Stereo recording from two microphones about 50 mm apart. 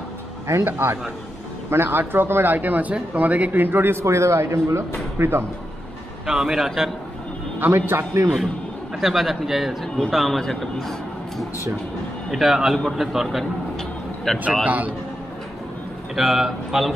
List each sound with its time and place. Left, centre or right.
0.7 s speech: right
3.6 s speech: right
4.0 s a man's voice: right
6.2 s a man's voice: centre
7.7 s speech: right
8.0 s a man's voice: right
8.9 s a man's voice: centre
13.7 s vehicle: centre
14.6 s a man's voice: right
16.2 s a man's voice: centre